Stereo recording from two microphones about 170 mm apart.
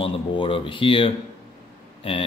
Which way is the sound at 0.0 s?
30° left (ahead or behind).